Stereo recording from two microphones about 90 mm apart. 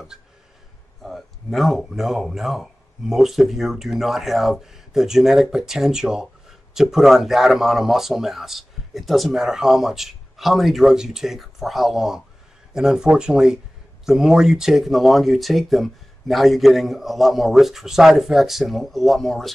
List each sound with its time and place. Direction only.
1.0 s speech: centre (ahead or behind)